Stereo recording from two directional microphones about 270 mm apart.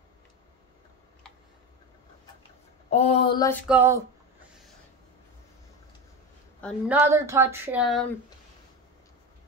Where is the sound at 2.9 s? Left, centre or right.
Left.